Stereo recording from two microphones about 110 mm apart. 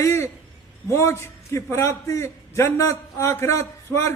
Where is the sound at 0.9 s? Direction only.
25° left (ahead or behind).